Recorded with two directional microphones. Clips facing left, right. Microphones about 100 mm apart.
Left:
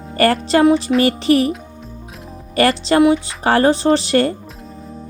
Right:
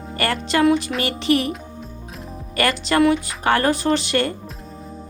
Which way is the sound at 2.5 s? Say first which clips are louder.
Left 5 dB; 35° left (ahead or behind).